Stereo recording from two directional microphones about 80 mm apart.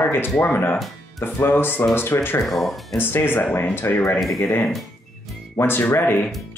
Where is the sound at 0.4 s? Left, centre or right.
Left.